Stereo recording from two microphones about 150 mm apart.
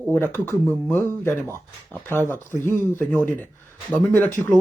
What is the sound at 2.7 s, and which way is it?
Speech, 15° left (ahead or behind).